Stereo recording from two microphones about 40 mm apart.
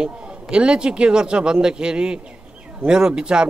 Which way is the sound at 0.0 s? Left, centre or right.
Right.